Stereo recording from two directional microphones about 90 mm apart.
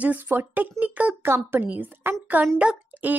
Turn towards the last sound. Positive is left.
turn(degrees=-20)  # may be behind; listen again after turning